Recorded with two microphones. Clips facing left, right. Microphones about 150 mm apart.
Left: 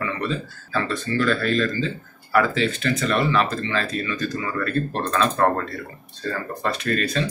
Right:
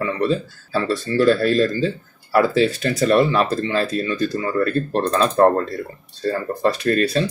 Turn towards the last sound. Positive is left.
turn(degrees=-35)  # may be behind; listen again after turning